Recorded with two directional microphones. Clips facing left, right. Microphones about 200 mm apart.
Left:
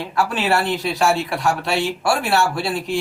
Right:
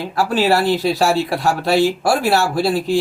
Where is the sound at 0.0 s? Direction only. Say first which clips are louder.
Right 4 dB; 35° right (ahead or behind).